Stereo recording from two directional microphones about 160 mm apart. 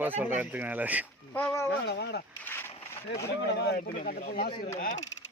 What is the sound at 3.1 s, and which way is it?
Speech, 90° left.